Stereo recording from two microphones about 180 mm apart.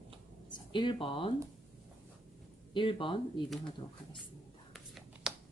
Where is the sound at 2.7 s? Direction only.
30° left (ahead or behind).